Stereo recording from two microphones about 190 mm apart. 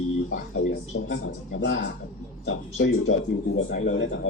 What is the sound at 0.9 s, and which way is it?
Speech, 75° left (ahead or behind).